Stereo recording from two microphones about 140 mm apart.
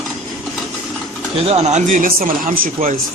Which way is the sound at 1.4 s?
50° right (ahead or behind).